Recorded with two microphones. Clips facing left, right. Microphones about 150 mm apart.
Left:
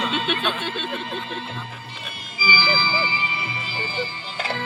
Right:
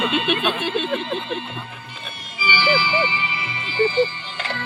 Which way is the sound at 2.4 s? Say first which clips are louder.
Right 3 dB; 35° left (ahead or behind).